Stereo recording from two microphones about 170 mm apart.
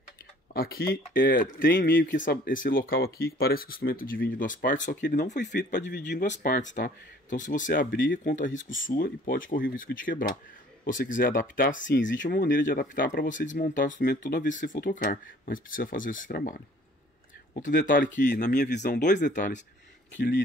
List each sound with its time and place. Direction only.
0.5 s speech: 65° left (ahead or behind)
5.8 s speech: 90° left
6.1 s speech: 45° left (ahead or behind); by 8.2 s 65° left (ahead or behind)
8.2 s speech: 50° left (ahead or behind)
11.8 s speech: 90° left; by 16.5 s 60° left (ahead or behind)
17.6 s speech: 50° left (ahead or behind)
20.2 s speech: 90° left